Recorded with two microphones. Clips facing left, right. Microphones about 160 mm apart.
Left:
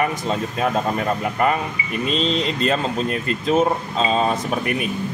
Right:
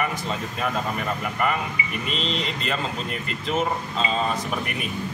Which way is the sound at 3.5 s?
40° left (ahead or behind).